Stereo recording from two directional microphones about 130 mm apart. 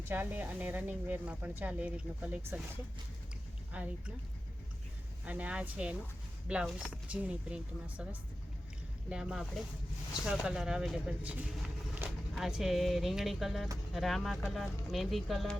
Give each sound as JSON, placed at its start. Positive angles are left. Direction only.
{"t": 0.1, "sound": "speech", "side_deg": -15}
{"t": 3.7, "sound": "speech", "side_deg": -10}
{"t": 5.2, "sound": "speech", "side_deg": -10}
{"t": 12.0, "sound": "a sound", "side_deg": -15}
{"t": 12.4, "sound": "speech", "side_deg": -5}